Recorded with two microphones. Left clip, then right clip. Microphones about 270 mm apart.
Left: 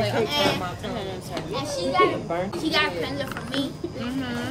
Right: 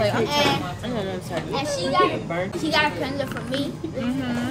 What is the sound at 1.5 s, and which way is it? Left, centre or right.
A woman's voice, centre.